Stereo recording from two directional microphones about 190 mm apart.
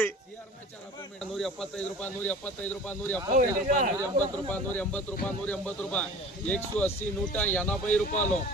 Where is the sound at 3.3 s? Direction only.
45° right (ahead or behind).